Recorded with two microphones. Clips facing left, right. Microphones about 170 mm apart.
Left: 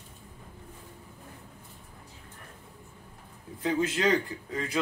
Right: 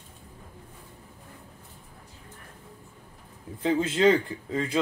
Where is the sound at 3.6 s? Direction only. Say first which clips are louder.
Right 4 dB; 25° right (ahead or behind).